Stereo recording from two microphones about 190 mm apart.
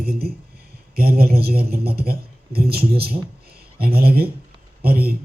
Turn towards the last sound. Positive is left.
turn(degrees=-55)  # may be behind; listen again after turning